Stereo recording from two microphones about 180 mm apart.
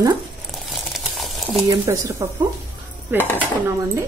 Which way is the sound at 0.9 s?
Centre (ahead or behind).